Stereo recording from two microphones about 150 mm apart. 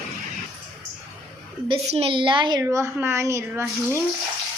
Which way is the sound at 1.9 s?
40° right (ahead or behind).